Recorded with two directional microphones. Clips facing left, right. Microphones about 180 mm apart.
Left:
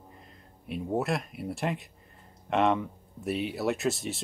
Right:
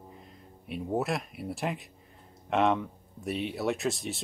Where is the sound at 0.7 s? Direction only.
Centre (ahead or behind).